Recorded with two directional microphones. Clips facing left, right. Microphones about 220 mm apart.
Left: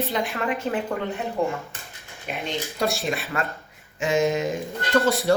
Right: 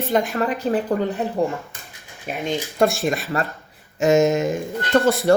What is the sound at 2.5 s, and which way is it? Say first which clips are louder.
Speech: right 7 dB; 50° right (ahead or behind).